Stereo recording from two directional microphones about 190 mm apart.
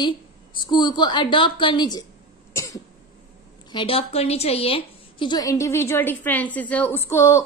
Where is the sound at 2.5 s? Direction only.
15° left (ahead or behind).